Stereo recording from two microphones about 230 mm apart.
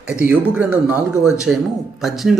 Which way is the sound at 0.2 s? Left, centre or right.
Centre.